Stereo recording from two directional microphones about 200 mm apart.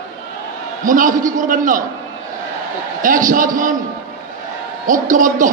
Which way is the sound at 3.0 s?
40° right (ahead or behind).